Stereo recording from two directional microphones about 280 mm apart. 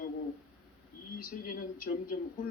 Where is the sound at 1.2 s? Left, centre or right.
Left.